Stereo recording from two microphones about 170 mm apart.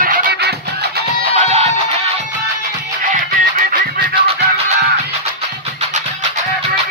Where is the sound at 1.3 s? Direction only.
35° right (ahead or behind).